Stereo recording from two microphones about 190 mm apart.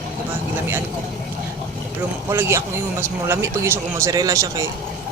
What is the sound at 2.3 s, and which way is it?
A man's voice, 15° right (ahead or behind).